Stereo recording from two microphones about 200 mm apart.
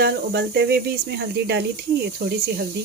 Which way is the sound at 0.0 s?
55° right (ahead or behind).